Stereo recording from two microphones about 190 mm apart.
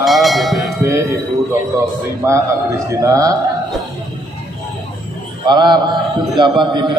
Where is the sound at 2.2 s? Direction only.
15° right (ahead or behind).